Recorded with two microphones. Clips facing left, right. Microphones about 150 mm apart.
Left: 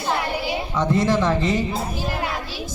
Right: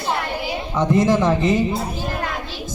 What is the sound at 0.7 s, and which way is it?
Speech, 15° right (ahead or behind).